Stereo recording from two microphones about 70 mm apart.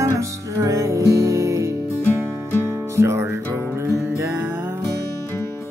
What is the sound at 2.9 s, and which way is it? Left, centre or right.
Music, right.